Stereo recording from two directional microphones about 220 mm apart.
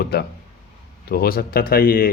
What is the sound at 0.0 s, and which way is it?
Speech, 45° left (ahead or behind).